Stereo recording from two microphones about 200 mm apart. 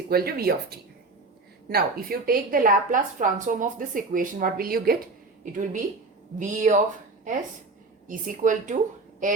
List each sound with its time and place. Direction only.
0.1 s a woman's voice: 50° right (ahead or behind)
8.0 s a woman's voice: 40° right (ahead or behind)